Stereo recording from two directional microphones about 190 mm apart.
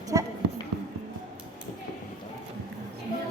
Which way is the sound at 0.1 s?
15° right (ahead or behind).